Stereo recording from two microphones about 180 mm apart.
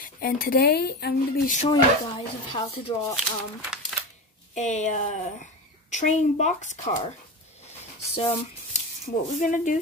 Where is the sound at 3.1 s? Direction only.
5° right (ahead or behind).